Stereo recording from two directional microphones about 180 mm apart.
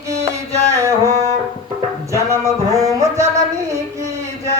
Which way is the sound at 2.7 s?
15° right (ahead or behind).